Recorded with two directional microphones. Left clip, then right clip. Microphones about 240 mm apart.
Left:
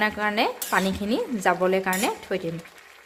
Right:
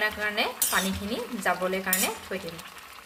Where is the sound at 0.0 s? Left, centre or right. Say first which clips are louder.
Left 4 dB; left.